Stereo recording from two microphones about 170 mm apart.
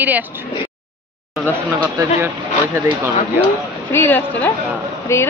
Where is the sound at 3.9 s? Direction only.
15° left (ahead or behind).